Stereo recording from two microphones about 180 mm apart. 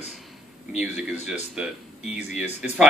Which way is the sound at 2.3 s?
40° left (ahead or behind).